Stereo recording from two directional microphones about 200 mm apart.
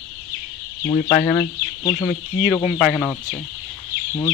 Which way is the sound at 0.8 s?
20° left (ahead or behind).